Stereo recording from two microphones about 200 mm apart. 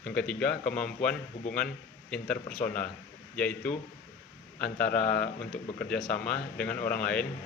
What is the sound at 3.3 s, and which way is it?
Speech, 5° left (ahead or behind).